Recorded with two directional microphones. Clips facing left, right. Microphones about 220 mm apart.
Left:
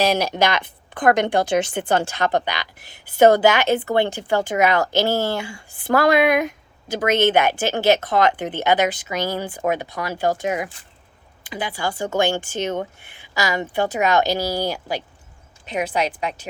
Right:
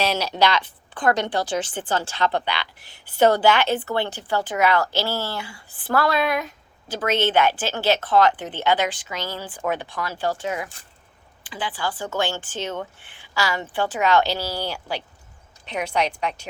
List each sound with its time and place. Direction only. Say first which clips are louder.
0.0 s speech: left 3 dB; 50° left (ahead or behind)
3.2 s speech: left 3 dB; 15° left (ahead or behind)
4.8 s speech: left 5 dB; 50° left (ahead or behind)
5.8 s speech: left 5 dB; 15° left (ahead or behind)